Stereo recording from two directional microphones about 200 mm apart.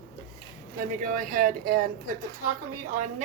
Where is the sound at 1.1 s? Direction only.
40° right (ahead or behind).